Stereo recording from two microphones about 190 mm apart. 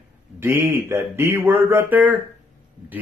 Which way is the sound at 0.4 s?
10° right (ahead or behind).